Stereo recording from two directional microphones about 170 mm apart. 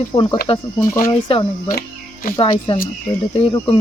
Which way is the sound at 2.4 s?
30° left (ahead or behind).